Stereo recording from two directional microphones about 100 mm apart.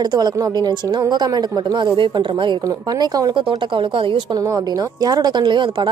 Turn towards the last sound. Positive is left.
turn(degrees=-50)  # may be behind; listen again after turning